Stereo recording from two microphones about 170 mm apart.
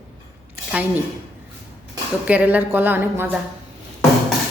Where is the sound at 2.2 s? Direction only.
10° right (ahead or behind).